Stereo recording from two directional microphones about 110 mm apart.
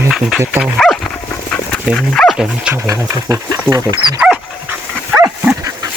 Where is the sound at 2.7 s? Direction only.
25° right (ahead or behind).